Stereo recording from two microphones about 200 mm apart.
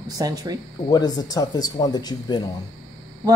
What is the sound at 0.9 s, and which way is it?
Speech, 20° left (ahead or behind).